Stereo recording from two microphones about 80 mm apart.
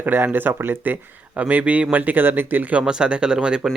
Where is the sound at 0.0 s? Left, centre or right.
Right.